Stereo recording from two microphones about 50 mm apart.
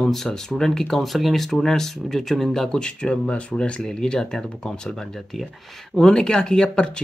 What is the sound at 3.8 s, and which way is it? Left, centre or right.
Speech, centre.